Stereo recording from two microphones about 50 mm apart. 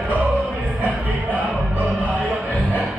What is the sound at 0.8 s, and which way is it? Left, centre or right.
Music, right.